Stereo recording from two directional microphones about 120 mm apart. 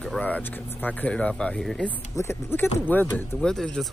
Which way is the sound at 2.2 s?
20° left (ahead or behind).